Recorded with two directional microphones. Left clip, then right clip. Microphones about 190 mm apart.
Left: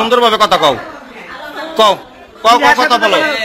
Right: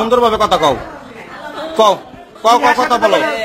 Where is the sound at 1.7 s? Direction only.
20° right (ahead or behind).